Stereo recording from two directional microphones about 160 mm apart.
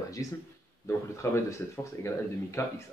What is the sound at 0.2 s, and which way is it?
A man's voice, 20° left (ahead or behind).